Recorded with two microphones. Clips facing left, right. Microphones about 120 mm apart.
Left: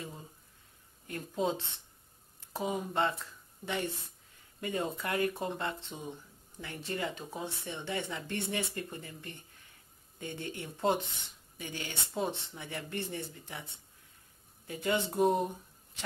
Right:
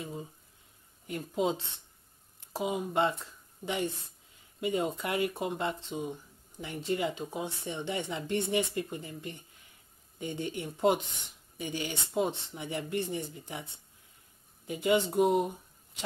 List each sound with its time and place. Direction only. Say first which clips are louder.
1.0 s speech: right 2 dB; 15° right (ahead or behind)
4.6 s speech: right 4 dB; 15° right (ahead or behind)
14.7 s speech: right 5 dB; 15° right (ahead or behind)